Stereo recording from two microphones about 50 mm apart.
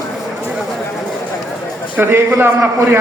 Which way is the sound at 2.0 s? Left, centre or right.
Right.